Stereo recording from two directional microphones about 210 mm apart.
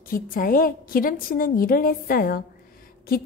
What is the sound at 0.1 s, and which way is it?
A woman's voice, 40° left (ahead or behind).